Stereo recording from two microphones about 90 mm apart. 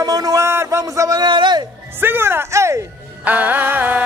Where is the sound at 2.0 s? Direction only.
25° right (ahead or behind).